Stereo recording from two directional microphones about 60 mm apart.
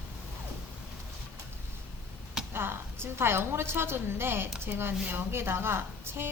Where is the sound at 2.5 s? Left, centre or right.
Right.